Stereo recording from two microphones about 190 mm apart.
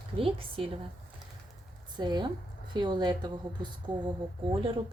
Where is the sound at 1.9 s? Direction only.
25° right (ahead or behind).